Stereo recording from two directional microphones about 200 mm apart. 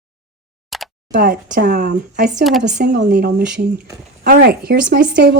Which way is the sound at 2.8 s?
50° right (ahead or behind).